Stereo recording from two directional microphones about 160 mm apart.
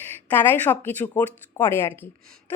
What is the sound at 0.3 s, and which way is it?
Speech, 10° left (ahead or behind).